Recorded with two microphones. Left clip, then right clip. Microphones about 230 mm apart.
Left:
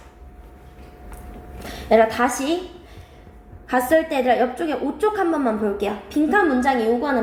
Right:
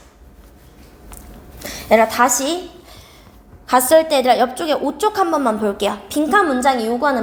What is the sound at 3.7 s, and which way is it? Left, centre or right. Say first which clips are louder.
A woman's voice: right 6 dB; right.